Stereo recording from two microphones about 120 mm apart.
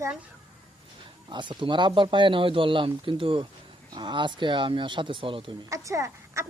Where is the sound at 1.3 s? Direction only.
40° right (ahead or behind).